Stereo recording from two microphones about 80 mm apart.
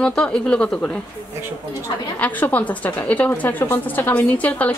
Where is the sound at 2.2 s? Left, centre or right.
Centre.